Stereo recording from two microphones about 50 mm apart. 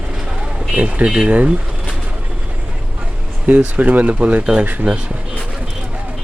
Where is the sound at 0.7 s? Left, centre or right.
Right.